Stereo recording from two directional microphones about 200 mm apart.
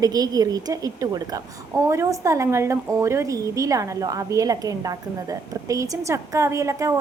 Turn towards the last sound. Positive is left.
turn(degrees=-15)  # may be behind; listen again after turning